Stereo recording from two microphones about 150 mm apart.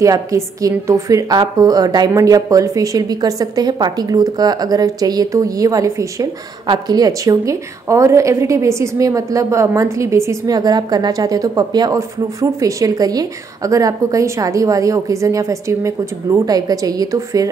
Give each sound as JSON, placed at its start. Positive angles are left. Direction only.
{"t": 0.0, "sound": "a woman's voice", "side_deg": -20}